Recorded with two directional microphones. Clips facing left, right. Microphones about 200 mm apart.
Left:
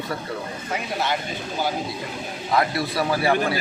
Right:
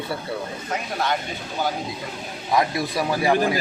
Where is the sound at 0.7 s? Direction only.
5° left (ahead or behind).